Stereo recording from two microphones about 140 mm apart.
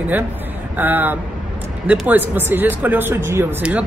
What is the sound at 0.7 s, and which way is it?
Speech, 15° right (ahead or behind).